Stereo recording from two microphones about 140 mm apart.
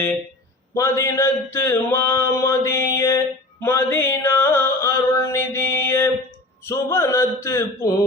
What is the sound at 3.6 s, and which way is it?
Music, 15° left (ahead or behind).